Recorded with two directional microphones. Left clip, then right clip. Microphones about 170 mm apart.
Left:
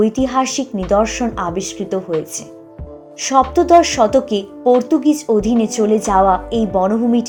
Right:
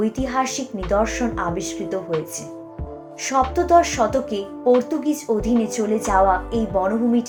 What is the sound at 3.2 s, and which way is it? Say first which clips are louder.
Speech: left 6 dB; 30° left (ahead or behind).